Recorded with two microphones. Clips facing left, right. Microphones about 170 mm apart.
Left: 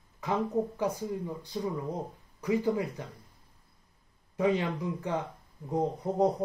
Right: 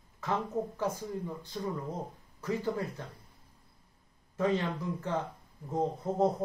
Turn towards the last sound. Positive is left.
turn(degrees=15)  # may be behind; listen again after turning